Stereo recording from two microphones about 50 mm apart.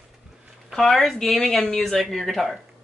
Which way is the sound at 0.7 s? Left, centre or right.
Centre.